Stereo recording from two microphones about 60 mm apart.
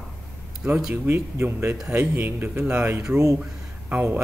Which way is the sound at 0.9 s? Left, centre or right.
Right.